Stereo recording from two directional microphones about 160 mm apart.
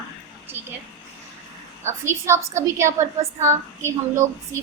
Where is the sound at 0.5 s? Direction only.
10° right (ahead or behind).